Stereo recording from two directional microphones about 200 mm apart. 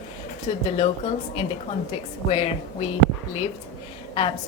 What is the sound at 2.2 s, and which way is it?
Speech, 25° left (ahead or behind).